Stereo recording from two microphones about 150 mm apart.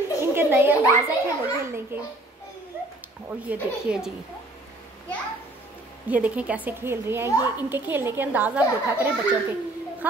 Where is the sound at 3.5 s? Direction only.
5° right (ahead or behind).